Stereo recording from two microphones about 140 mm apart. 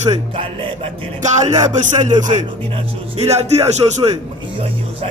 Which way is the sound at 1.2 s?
60° right (ahead or behind).